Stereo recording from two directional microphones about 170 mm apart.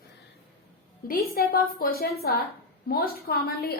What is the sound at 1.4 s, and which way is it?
A woman's voice, 60° left (ahead or behind).